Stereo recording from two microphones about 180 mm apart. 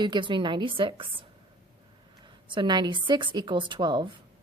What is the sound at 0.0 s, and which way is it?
A woman's voice, 25° right (ahead or behind).